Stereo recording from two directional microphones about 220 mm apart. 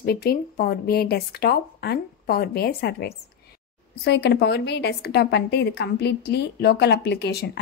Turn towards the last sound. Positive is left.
turn(degrees=50)  # may be behind; listen again after turning